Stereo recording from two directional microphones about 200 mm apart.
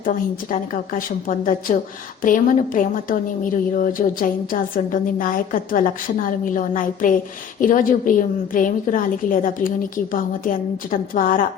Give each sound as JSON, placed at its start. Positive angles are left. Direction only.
{"t": 0.5, "sound": "a woman's voice", "side_deg": 40}